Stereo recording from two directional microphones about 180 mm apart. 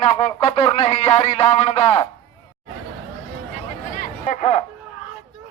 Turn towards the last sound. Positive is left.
turn(degrees=40)  # may be behind; listen again after turning